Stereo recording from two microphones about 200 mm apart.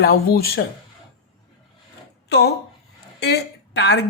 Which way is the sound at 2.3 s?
55° left (ahead or behind).